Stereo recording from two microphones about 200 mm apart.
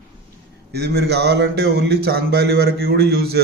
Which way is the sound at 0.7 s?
55° right (ahead or behind).